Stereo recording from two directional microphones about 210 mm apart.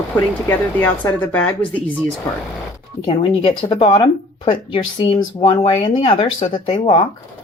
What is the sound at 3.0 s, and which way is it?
Speech, 25° left (ahead or behind).